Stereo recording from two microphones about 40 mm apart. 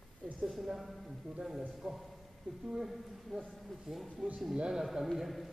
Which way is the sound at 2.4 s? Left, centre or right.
Right.